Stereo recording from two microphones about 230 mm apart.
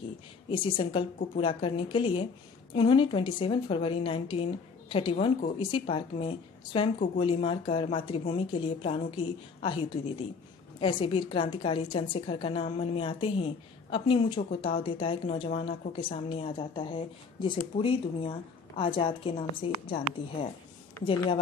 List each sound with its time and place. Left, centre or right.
0.5 s a woman's voice: left